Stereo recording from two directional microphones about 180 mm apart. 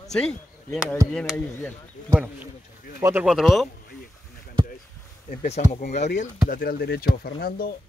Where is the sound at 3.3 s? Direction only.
Centre (ahead or behind).